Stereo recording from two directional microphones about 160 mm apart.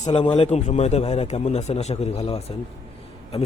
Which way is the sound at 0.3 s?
45° left (ahead or behind).